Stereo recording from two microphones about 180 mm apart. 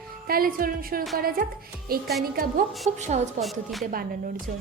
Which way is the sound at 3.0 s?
40° right (ahead or behind).